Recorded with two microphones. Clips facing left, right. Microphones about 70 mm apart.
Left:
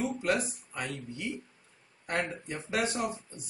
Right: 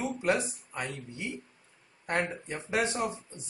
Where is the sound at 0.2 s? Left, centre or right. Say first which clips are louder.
Right 1 dB; right.